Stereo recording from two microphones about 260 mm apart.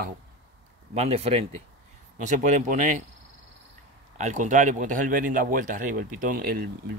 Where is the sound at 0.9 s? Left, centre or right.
Right.